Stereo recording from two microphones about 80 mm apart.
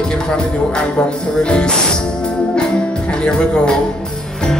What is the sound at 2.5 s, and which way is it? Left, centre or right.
Music, centre.